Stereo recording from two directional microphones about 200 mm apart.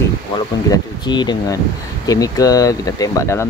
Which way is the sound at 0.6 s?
20° left (ahead or behind).